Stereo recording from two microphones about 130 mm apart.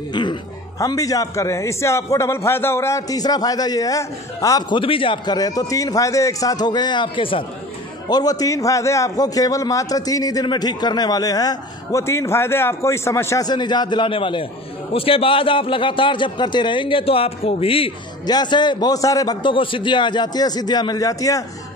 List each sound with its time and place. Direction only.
0.1 s a man's voice: 35° left (ahead or behind)
8.1 s a man's voice: 30° left (ahead or behind)
13.5 s a man's voice: 35° left (ahead or behind)
18.2 s a man's voice: 35° left (ahead or behind)